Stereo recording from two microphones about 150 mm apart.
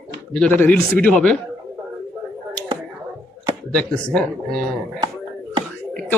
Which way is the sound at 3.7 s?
5° left (ahead or behind).